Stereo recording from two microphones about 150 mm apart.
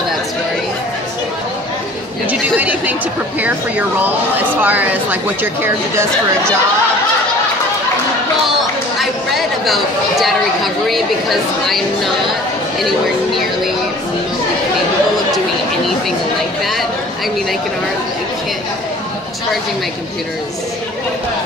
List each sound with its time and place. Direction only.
2.6 s a sound: 10° right (ahead or behind)
4.6 s speech: 10° right (ahead or behind)
9.3 s speech: centre (ahead or behind)